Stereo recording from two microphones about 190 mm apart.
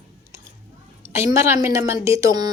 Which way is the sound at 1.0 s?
15° right (ahead or behind).